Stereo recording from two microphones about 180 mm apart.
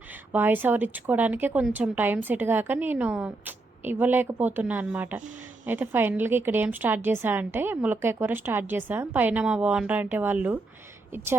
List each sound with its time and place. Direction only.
0.1 s a woman's voice: 10° right (ahead or behind)